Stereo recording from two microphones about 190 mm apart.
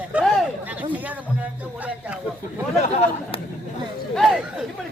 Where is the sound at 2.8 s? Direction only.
35° left (ahead or behind).